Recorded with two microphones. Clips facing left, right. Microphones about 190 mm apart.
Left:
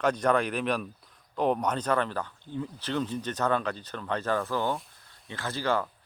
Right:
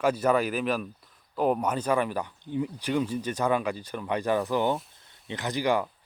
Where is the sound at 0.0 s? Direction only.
5° right (ahead or behind).